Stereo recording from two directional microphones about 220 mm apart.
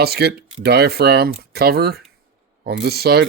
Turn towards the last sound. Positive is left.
turn(degrees=-45)  # may be behind; listen again after turning